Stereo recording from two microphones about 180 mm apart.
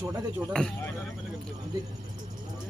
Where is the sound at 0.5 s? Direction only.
5° left (ahead or behind).